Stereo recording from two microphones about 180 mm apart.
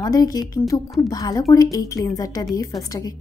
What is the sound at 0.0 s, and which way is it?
A woman's voice, 20° left (ahead or behind).